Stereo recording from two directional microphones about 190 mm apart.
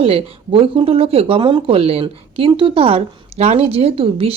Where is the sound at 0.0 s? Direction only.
30° right (ahead or behind).